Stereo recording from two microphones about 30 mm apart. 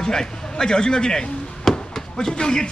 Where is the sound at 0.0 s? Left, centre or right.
Centre.